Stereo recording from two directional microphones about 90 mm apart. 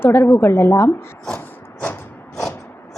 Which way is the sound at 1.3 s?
20° left (ahead or behind).